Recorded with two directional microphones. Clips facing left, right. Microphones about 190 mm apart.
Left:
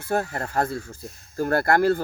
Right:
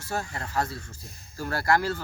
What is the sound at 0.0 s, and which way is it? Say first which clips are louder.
Speech: left 7 dB; 55° left (ahead or behind).